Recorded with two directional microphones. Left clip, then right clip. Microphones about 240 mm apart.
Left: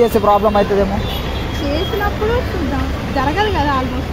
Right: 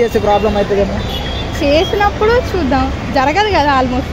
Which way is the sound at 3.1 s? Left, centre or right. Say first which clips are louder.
Right 5 dB; right.